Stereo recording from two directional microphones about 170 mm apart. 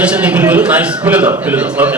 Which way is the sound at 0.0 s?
5° right (ahead or behind).